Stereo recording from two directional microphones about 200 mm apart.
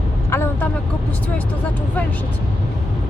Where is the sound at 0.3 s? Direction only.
10° left (ahead or behind).